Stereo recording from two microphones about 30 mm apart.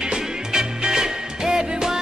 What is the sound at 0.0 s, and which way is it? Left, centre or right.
Music, right.